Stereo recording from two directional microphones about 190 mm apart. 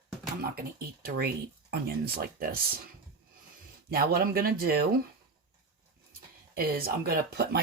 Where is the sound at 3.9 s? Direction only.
50° right (ahead or behind).